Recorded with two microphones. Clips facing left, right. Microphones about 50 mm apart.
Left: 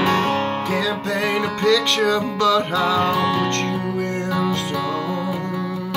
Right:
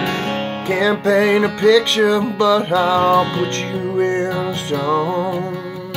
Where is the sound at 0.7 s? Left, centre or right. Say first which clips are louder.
Right 6 dB; right.